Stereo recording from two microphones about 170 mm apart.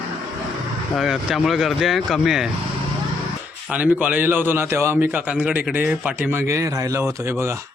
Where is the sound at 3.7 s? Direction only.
10° right (ahead or behind).